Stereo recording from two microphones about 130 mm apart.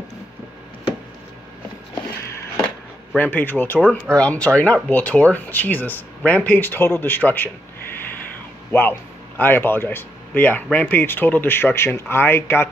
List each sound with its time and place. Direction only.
3.2 s speech: 15° left (ahead or behind)
9.4 s speech: 15° left (ahead or behind)